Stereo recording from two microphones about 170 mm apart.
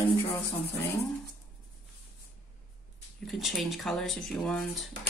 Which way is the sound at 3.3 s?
Centre (ahead or behind).